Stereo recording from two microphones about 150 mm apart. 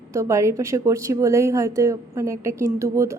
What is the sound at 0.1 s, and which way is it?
A woman's voice, 20° right (ahead or behind).